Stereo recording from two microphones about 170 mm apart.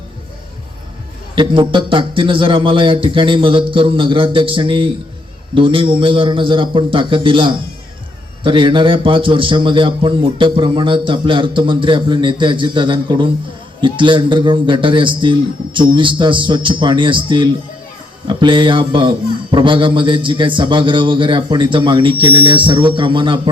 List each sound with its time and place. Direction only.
1.4 s a man's voice: 30° right (ahead or behind)